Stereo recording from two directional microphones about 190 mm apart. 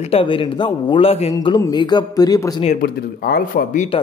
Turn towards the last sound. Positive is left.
turn(degrees=45)  # may be behind; listen again after turning